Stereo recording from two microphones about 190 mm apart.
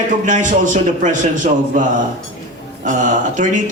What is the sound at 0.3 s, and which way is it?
Speech, 40° right (ahead or behind).